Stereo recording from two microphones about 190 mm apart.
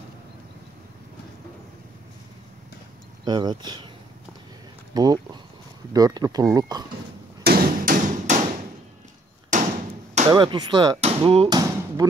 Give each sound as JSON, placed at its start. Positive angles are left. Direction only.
{"t": 3.3, "sound": "speech", "side_deg": -20}
{"t": 4.9, "sound": "speech", "side_deg": -20}
{"t": 7.4, "sound": "hammer", "side_deg": -50}
{"t": 9.5, "sound": "hammer", "side_deg": -40}
{"t": 10.3, "sound": "speech", "side_deg": -25}